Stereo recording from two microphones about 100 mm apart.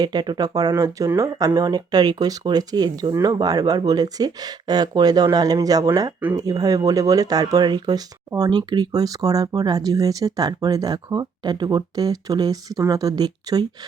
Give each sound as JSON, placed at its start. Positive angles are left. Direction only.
{"t": 0.0, "sound": "speech", "side_deg": -45}